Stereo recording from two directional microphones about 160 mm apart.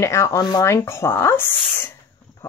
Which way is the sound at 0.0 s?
20° left (ahead or behind).